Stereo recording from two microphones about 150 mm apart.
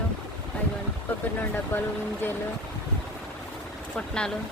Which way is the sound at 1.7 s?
15° left (ahead or behind).